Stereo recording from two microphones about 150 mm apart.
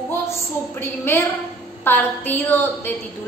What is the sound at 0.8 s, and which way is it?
A woman's voice, 15° left (ahead or behind).